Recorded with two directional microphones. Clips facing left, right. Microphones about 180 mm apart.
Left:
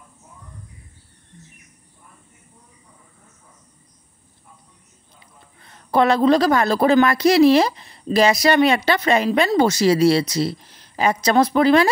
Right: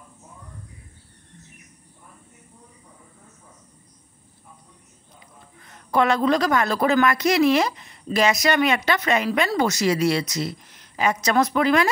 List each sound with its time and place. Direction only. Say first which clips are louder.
5.6 s a woman's voice: left 3 dB; 30° left (ahead or behind)